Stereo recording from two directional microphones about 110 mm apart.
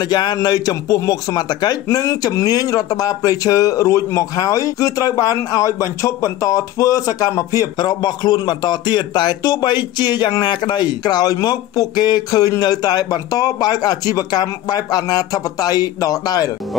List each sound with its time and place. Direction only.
0.0 s a man's voice: 40° left (ahead or behind)